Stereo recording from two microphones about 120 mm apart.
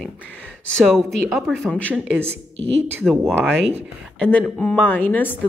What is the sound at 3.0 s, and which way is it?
A woman's voice, centre (ahead or behind).